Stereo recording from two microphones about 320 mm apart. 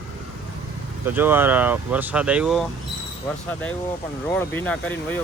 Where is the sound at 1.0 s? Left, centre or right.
Centre.